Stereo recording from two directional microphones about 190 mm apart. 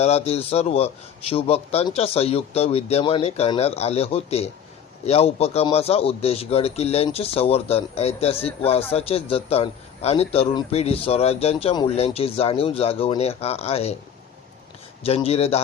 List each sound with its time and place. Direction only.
0.0 s a man's voice: 35° left (ahead or behind)
15.0 s a man's voice: 30° left (ahead or behind)